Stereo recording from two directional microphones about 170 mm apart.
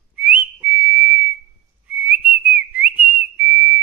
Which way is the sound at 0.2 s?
10° right (ahead or behind).